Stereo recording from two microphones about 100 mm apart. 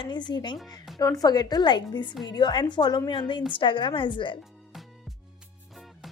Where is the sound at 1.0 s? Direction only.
35° left (ahead or behind); by 4.4 s 55° left (ahead or behind).